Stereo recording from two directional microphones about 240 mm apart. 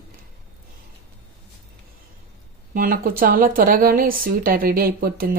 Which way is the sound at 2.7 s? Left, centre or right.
Right.